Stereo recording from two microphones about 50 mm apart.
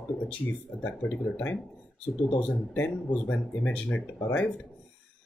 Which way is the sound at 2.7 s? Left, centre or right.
Left.